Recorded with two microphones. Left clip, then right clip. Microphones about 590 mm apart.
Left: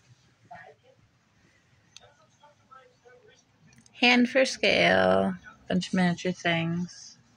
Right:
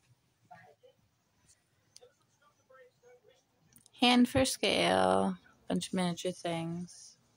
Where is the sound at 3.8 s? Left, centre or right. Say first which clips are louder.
Left 5 dB; right.